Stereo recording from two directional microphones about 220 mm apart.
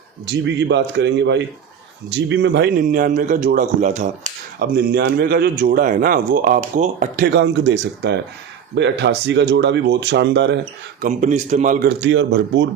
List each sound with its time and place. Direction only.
0.3 s speech: 50° right (ahead or behind)
2.8 s speech: 40° right (ahead or behind)
7.3 s speech: 50° right (ahead or behind)
11.0 s speech: 35° right (ahead or behind); by 12.6 s 55° right (ahead or behind)